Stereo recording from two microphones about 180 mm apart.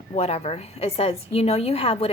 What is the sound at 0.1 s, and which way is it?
A woman's voice, 35° left (ahead or behind).